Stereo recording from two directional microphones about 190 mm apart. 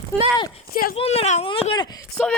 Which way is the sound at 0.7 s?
50° left (ahead or behind).